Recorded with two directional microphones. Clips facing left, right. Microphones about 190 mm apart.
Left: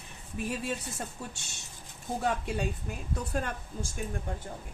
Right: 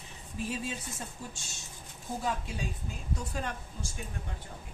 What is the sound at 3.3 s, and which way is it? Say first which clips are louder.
Speech: left 4 dB; 50° left (ahead or behind).